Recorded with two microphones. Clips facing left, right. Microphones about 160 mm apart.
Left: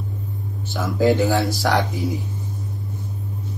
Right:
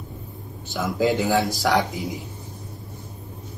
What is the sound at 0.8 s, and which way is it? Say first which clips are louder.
Speech: left 3 dB; 15° right (ahead or behind).